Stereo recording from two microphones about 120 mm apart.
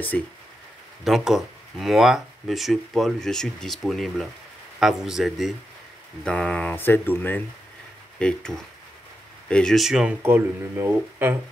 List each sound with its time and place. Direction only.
0.1 s speech: 10° left (ahead or behind)
1.0 s speech: centre (ahead or behind)
10.2 s speech: 20° right (ahead or behind)